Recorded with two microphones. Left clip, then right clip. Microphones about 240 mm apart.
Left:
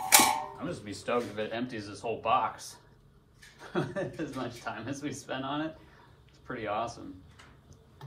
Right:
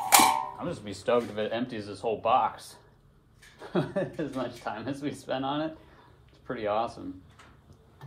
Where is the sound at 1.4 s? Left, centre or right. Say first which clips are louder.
Right 4 dB; right.